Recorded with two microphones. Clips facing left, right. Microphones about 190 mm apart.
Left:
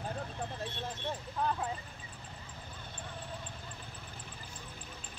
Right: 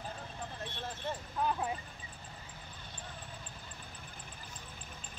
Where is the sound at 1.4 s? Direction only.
10° right (ahead or behind).